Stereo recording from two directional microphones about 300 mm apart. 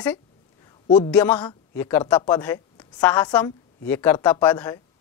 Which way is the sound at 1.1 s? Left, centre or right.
Centre.